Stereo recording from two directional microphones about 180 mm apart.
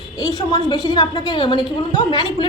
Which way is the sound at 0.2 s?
20° left (ahead or behind).